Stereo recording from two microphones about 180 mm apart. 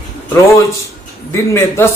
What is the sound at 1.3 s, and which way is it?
Speech, 15° left (ahead or behind).